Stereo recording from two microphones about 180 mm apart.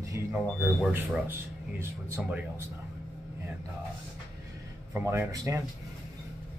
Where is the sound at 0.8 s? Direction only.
5° right (ahead or behind).